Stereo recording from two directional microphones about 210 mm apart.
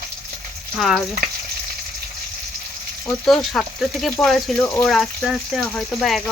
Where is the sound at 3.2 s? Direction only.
Centre (ahead or behind).